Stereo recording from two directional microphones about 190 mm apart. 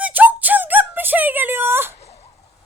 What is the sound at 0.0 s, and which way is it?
Music, 10° right (ahead or behind).